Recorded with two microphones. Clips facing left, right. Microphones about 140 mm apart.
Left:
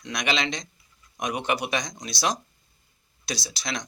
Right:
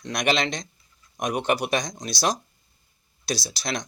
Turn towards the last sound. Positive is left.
turn(degrees=-40)  # may be behind; listen again after turning